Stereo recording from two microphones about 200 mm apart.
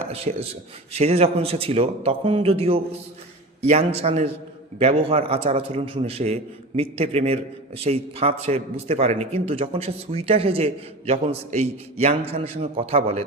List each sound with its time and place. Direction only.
0.1 s a man's voice: 30° right (ahead or behind)